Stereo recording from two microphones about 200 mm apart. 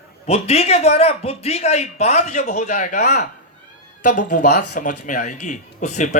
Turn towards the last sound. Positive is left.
turn(degrees=35)  # may be behind; listen again after turning